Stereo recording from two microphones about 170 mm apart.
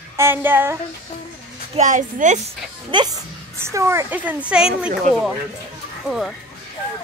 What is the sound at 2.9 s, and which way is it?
Speech, 25° right (ahead or behind).